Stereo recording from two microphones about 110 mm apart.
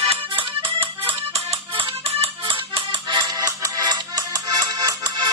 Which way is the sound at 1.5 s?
55° right (ahead or behind).